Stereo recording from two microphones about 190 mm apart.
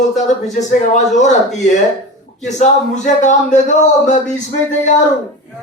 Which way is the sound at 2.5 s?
40° left (ahead or behind).